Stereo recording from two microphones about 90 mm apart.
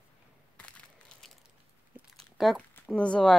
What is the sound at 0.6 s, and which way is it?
Crushing, 15° left (ahead or behind).